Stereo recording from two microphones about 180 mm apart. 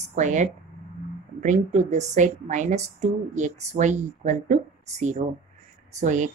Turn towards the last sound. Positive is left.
turn(degrees=-45)  # may be behind; listen again after turning